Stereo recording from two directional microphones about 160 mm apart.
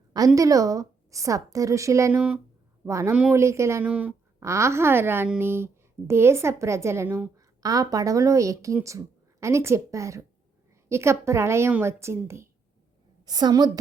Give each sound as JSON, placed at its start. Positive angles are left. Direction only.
{"t": 0.3, "sound": "a woman's voice", "side_deg": -20}